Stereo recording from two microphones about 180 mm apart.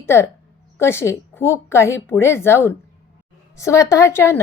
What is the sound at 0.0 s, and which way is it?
A woman's voice, 15° left (ahead or behind).